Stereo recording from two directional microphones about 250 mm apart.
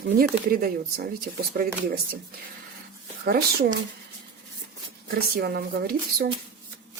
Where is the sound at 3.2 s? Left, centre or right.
Right.